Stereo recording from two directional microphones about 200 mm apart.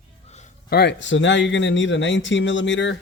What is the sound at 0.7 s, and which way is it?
Speech, 55° left (ahead or behind).